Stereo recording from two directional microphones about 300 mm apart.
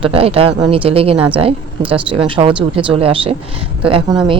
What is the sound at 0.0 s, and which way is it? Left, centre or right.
Speech, centre.